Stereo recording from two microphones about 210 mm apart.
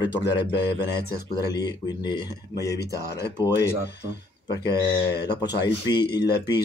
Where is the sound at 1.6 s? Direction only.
20° left (ahead or behind).